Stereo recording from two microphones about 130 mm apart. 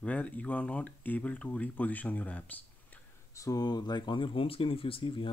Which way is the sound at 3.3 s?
25° left (ahead or behind).